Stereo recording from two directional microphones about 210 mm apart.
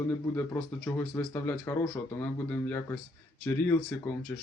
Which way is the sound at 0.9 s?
10° left (ahead or behind).